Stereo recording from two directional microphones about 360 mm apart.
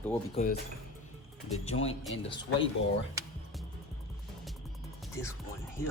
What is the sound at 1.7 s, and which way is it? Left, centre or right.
Speech, left.